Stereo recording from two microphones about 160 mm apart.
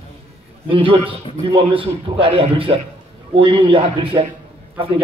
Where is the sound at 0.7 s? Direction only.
35° right (ahead or behind).